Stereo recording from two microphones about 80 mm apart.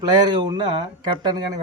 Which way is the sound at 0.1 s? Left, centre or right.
Right.